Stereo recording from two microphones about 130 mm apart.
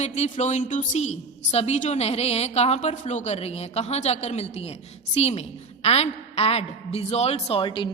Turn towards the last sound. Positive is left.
turn(degrees=40)  # may be behind; listen again after turning